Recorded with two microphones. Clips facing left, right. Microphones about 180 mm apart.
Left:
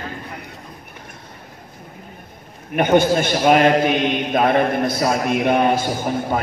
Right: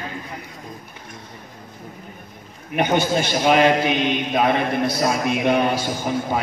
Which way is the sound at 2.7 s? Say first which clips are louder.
Left 4 dB; 50° left (ahead or behind).